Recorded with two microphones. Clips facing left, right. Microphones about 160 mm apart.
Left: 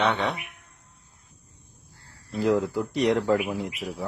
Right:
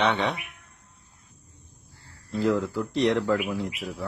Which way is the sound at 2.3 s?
15° left (ahead or behind).